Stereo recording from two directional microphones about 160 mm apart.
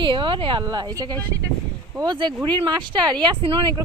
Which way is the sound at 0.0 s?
30° right (ahead or behind).